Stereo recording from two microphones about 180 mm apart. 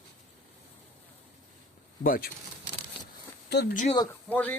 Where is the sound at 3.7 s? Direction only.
45° left (ahead or behind).